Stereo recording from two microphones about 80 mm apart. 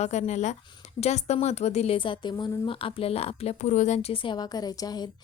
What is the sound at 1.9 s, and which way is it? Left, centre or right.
Speech, left.